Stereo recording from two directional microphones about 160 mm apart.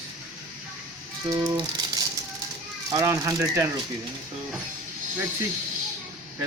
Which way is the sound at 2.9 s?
20° right (ahead or behind).